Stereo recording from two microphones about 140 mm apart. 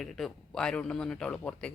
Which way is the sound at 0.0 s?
5° left (ahead or behind).